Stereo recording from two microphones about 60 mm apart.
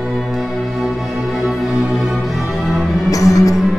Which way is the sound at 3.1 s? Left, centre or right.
Left.